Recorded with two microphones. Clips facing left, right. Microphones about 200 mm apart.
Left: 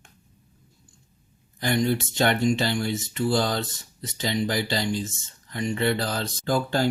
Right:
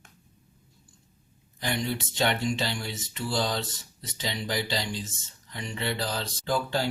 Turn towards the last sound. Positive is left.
turn(degrees=50)  # may be behind; listen again after turning